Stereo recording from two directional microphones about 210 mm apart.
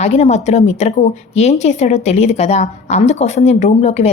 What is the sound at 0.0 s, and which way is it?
Speech, 30° left (ahead or behind).